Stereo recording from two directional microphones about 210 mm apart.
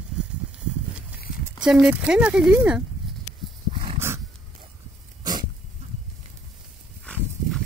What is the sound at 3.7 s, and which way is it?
Dog, 25° right (ahead or behind).